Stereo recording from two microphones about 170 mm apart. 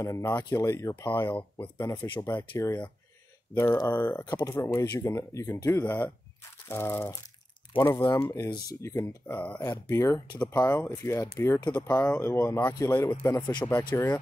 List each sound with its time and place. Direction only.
0.0 s speech: 15° left (ahead or behind)